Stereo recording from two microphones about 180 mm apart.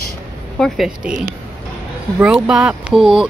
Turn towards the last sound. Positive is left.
turn(degrees=-5)  # may be behind; listen again after turning